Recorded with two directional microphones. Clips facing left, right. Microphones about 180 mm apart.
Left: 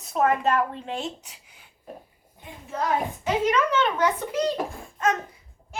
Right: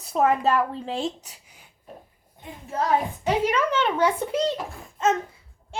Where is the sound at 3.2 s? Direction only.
30° right (ahead or behind).